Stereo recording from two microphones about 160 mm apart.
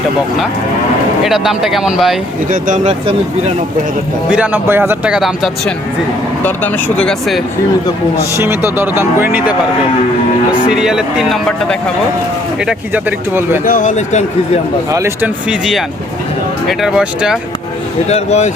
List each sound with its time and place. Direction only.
1.2 s speech: centre (ahead or behind)
2.5 s speech: 55° right (ahead or behind)
4.3 s speech: 10° right (ahead or behind)
6.4 s speech: 10° left (ahead or behind)
8.4 s speech: 15° right (ahead or behind); by 11.8 s 5° left (ahead or behind)
12.5 s speech: 5° right (ahead or behind)
13.7 s speech: 55° left (ahead or behind)
14.8 s speech: 20° right (ahead or behind)
15.4 s speech: 5° right (ahead or behind)
18.1 s speech: 45° left (ahead or behind)